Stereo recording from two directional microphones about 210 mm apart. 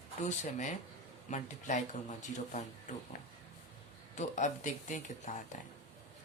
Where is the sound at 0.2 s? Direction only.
35° left (ahead or behind).